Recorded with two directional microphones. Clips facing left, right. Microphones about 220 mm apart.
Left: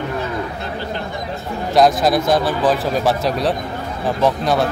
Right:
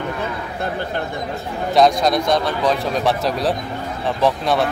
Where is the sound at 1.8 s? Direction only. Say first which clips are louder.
Left 1 dB; 5° left (ahead or behind).